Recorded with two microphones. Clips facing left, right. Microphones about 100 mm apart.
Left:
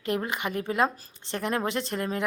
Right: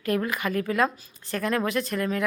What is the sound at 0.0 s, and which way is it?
A woman's voice, 25° left (ahead or behind).